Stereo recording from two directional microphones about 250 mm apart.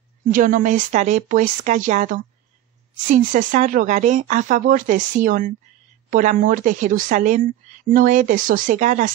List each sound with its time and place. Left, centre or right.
0.3 s speech: right